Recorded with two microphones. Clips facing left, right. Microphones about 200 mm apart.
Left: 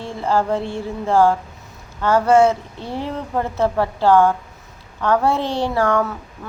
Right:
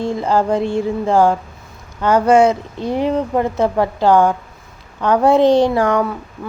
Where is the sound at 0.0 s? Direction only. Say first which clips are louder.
Right 4 dB; 15° right (ahead or behind).